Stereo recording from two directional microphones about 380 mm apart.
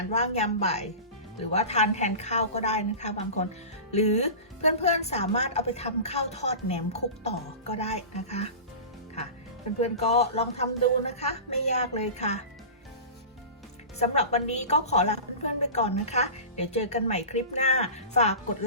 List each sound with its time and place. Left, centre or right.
0.1 s a woman's voice: centre
10.0 s a woman's voice: centre
14.0 s a woman's voice: centre